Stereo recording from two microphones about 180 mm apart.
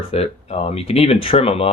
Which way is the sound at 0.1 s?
35° left (ahead or behind).